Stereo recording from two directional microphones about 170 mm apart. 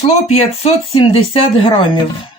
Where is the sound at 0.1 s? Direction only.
40° left (ahead or behind).